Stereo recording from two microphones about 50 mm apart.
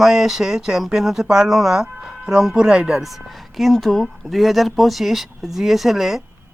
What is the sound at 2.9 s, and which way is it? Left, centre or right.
Speech, centre.